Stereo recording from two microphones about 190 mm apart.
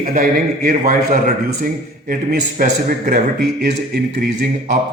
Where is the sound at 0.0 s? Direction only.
45° right (ahead or behind).